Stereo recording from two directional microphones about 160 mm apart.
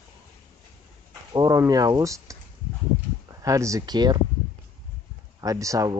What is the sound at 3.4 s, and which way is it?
Speech, 20° right (ahead or behind).